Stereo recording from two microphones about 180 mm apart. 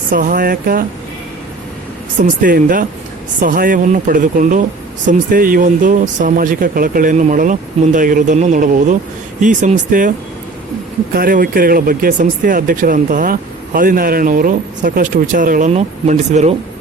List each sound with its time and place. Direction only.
0.1 s speech: 50° right (ahead or behind)
2.2 s speech: 50° right (ahead or behind)
11.1 s speech: 55° right (ahead or behind)